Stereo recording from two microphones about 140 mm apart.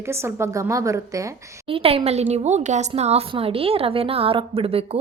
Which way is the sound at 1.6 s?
40° right (ahead or behind).